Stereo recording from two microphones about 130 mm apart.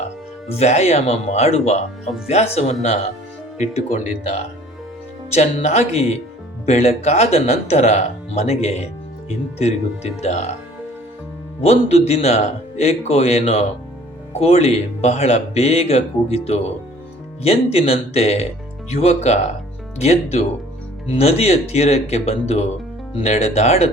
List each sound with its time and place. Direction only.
0.4 s speech: 60° left (ahead or behind)
3.6 s speech: 70° left (ahead or behind)
5.3 s speech: 55° left (ahead or behind)
11.6 s speech: 55° left (ahead or behind)